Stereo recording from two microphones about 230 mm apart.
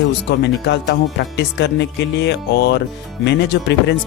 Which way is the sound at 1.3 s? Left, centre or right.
Left.